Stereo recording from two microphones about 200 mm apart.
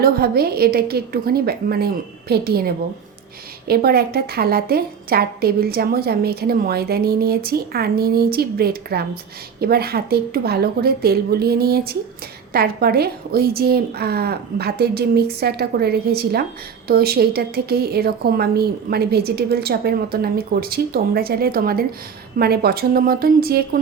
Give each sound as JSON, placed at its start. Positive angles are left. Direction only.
{"t": 0.0, "sound": "a woman's voice", "side_deg": -50}